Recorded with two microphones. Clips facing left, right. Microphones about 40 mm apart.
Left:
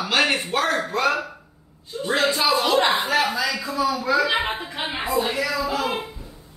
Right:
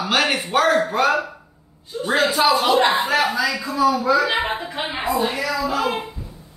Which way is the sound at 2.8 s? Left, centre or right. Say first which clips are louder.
Right 2 dB; right.